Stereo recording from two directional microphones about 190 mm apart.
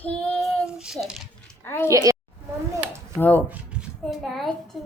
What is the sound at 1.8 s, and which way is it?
Speech, 15° right (ahead or behind).